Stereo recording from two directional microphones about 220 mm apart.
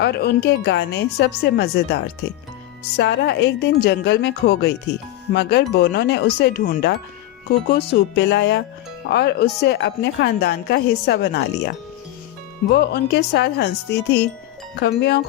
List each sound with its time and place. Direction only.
0.0 s speech: 45° left (ahead or behind)
3.0 s speech: 50° left (ahead or behind)
12.7 s speech: 50° left (ahead or behind)